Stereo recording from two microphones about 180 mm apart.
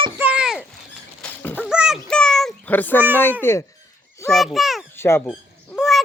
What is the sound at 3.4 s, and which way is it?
Speech, 15° left (ahead or behind).